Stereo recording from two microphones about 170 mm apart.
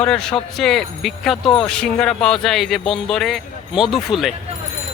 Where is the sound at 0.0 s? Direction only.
5° left (ahead or behind).